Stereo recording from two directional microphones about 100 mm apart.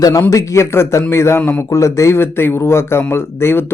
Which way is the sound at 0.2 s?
30° left (ahead or behind).